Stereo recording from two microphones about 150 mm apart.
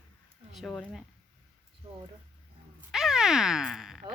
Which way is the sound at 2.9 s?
Centre (ahead or behind).